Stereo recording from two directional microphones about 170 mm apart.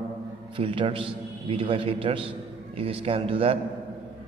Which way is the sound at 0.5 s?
30° right (ahead or behind).